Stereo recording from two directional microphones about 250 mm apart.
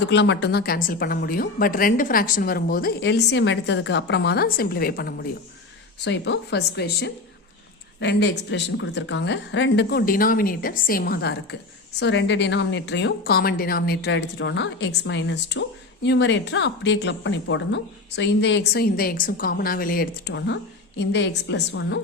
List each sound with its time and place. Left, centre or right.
0.1 s a woman's voice: left